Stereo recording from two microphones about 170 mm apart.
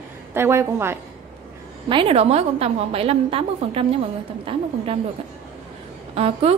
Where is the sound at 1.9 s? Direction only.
35° right (ahead or behind).